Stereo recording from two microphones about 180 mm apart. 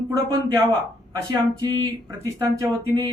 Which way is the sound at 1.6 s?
20° right (ahead or behind).